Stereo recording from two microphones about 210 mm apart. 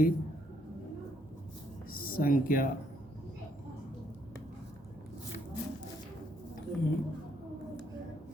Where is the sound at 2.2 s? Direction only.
40° left (ahead or behind).